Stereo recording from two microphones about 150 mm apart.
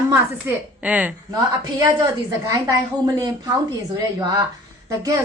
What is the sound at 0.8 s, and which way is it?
Snicker, 10° right (ahead or behind).